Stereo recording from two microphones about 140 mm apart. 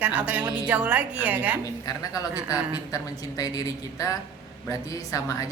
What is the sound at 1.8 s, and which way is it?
A woman's voice, 25° left (ahead or behind).